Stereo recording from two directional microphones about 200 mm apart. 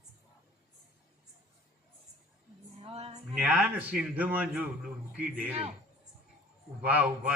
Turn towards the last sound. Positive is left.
turn(degrees=-5)  # may be behind; listen again after turning